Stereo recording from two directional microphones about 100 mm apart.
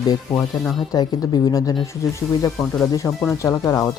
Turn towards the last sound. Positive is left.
turn(degrees=35)  # may be behind; listen again after turning